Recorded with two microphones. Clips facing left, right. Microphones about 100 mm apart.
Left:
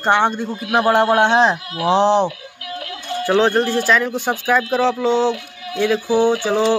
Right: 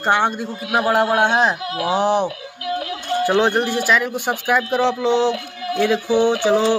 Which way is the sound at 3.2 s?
15° right (ahead or behind).